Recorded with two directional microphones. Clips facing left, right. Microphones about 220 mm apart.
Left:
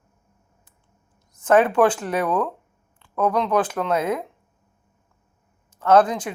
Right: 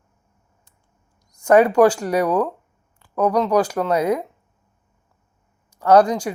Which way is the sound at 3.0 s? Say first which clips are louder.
Right 3 dB; 35° right (ahead or behind).